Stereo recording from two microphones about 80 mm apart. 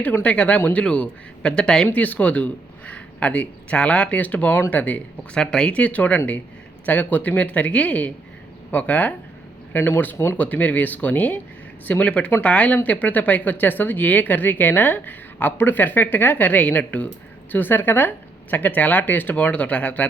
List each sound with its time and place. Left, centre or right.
0.0 s speech: centre
1.9 s a man's voice: left